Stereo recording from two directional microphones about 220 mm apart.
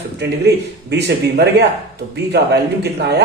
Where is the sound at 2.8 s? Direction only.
50° right (ahead or behind).